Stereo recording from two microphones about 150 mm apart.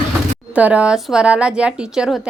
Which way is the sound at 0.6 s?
10° right (ahead or behind).